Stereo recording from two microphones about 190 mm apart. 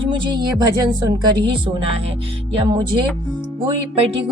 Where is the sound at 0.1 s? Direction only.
25° right (ahead or behind).